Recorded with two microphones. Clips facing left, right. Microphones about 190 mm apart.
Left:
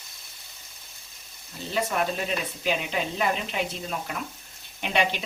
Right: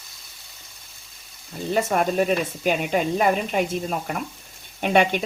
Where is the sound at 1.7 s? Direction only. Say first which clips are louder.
Right 6 dB; 50° right (ahead or behind).